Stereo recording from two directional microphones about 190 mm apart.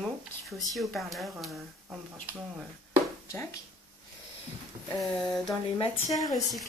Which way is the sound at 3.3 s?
15° left (ahead or behind).